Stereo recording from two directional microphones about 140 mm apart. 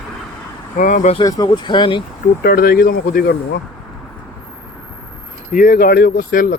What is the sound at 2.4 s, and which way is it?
Speech, 90° left.